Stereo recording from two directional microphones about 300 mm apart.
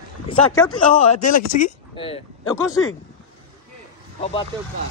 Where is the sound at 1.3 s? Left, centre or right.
Left.